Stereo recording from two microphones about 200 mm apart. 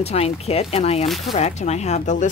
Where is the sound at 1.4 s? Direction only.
35° left (ahead or behind).